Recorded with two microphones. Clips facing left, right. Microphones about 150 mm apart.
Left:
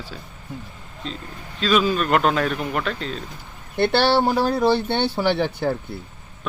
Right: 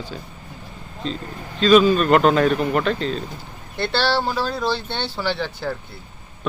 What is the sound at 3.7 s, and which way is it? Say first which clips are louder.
Speech: left 4 dB; 55° left (ahead or behind).